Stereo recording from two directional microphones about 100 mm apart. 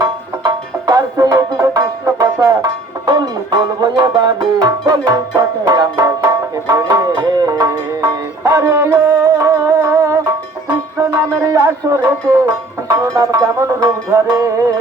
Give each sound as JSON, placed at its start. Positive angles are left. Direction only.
{"t": 0.0, "sound": "music", "side_deg": -35}
{"t": 3.1, "sound": "music", "side_deg": -45}